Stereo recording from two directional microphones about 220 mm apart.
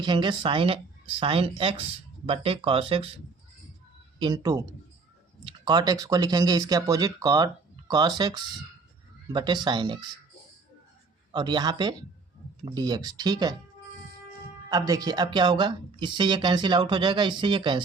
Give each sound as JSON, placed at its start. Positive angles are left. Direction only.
{"t": 0.0, "sound": "speech", "side_deg": -20}
{"t": 4.2, "sound": "speech", "side_deg": -15}
{"t": 11.3, "sound": "speech", "side_deg": -20}
{"t": 14.7, "sound": "speech", "side_deg": -15}